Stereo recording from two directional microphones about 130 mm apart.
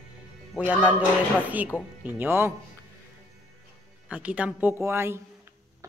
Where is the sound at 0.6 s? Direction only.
10° right (ahead or behind).